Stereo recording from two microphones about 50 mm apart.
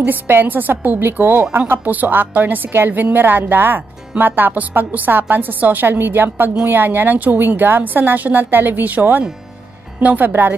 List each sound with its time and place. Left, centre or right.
0.0 s a woman's voice: right
5.9 s a woman's voice: right